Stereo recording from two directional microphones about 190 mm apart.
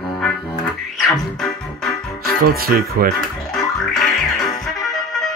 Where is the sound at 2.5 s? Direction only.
50° right (ahead or behind).